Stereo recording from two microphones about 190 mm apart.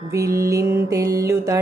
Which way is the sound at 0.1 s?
15° right (ahead or behind).